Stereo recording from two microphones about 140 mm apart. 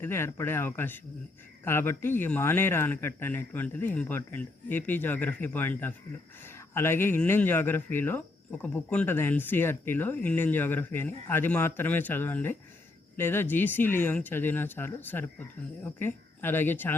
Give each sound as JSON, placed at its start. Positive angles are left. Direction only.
{"t": 0.0, "sound": "speech", "side_deg": 15}